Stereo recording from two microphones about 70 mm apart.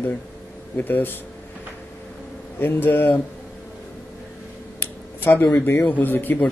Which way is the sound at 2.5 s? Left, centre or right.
Left.